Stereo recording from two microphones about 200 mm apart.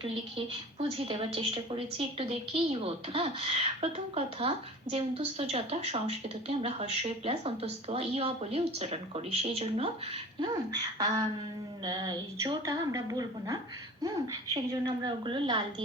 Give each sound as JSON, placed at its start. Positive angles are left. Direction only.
{"t": 0.0, "sound": "a woman's voice", "side_deg": -25}
{"t": 10.4, "sound": "a woman's voice", "side_deg": -20}